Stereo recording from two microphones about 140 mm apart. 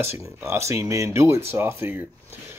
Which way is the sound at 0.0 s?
20° right (ahead or behind).